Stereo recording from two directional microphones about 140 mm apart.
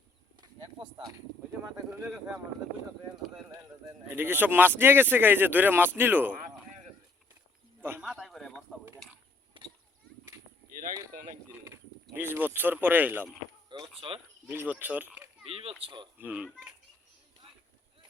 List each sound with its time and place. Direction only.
0.4 s a sound: 35° right (ahead or behind)
1.6 s speech: 15° right (ahead or behind)
4.1 s speech: 15° right (ahead or behind)
7.8 s speech: 15° right (ahead or behind)
8.0 s speech: centre (ahead or behind)
9.5 s a sound: 35° right (ahead or behind)
12.1 s speech: 15° right (ahead or behind)
13.7 s a sound: 35° right (ahead or behind)
14.4 s speech: 15° right (ahead or behind)
15.4 s speech: 45° right (ahead or behind)
16.1 s speech: 10° right (ahead or behind)